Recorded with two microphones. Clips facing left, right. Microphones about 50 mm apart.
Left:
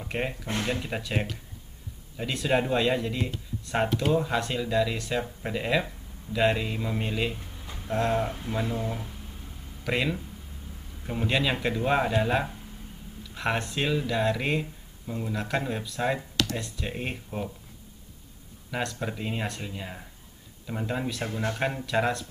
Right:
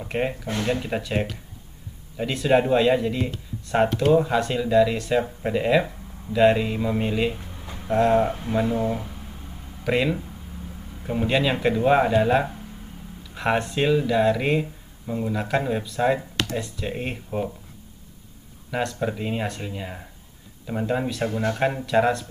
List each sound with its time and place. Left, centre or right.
0.0 s speech: centre
7.6 s a sound: right
7.9 s speech: centre
8.3 s speech: right
9.8 s speech: centre
16.2 s a sound: right
16.5 s speech: centre
18.7 s speech: centre